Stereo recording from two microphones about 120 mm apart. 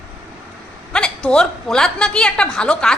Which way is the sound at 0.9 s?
5° left (ahead or behind).